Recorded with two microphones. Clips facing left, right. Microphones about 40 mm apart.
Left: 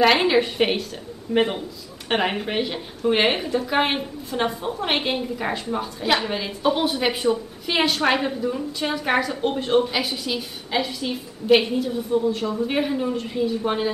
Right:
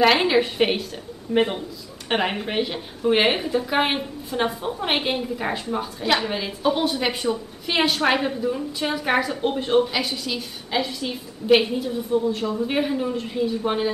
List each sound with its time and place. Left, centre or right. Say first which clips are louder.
0.0 s a woman's voice: even; centre